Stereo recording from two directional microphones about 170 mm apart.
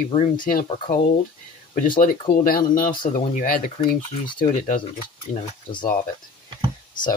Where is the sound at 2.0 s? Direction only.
55° left (ahead or behind).